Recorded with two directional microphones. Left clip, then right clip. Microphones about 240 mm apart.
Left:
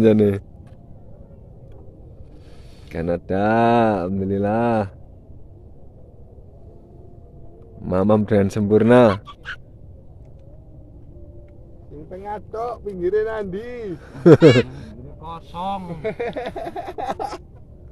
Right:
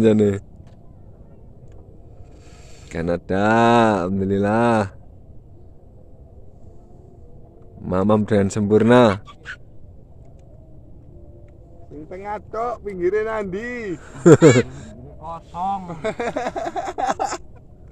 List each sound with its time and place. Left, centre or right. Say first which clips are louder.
0.0 s speech: left 1 dB; centre
2.9 s speech: even; centre
7.8 s speech: left 1 dB; centre
9.2 s speech: left 2 dB; left
11.9 s speech: right 1 dB; right
14.0 s speech: even; centre
15.5 s a man's voice: right 2 dB; centre
16.0 s speech: right 2 dB; right